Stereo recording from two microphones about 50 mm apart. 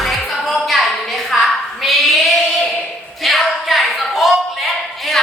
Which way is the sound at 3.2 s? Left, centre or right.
Centre.